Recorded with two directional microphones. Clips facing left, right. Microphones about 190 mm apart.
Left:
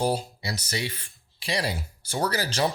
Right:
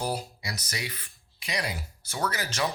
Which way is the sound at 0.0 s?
30° left (ahead or behind).